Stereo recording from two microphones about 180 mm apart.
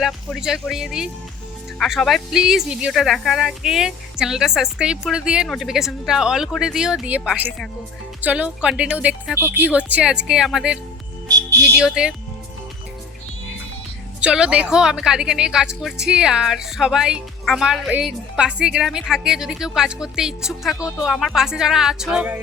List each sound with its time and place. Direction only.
0.3 s a woman's voice: 5° right (ahead or behind)
11.3 s music: 20° right (ahead or behind)
11.8 s a woman's voice: 5° right (ahead or behind)
14.2 s a woman's voice: 5° right (ahead or behind)